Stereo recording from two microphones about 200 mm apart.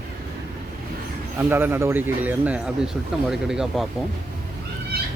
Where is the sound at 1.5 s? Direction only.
10° right (ahead or behind).